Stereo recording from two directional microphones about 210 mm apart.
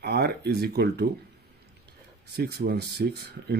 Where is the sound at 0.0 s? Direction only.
50° right (ahead or behind).